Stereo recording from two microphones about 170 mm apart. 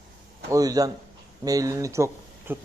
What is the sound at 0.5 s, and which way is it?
A man's voice, 20° right (ahead or behind).